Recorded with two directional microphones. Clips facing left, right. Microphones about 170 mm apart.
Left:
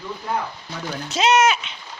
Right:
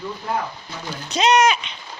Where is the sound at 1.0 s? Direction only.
5° left (ahead or behind).